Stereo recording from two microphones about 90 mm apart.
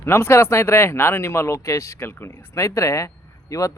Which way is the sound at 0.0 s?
30° left (ahead or behind).